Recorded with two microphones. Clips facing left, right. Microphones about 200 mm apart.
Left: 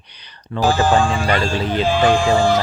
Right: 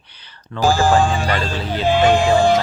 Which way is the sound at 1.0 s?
25° right (ahead or behind).